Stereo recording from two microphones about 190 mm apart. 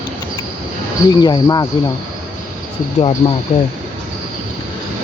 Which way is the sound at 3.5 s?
35° left (ahead or behind).